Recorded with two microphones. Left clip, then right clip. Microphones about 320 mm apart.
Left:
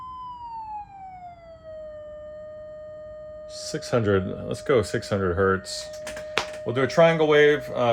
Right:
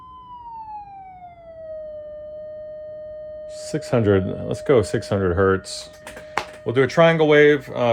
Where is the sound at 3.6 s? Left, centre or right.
Centre.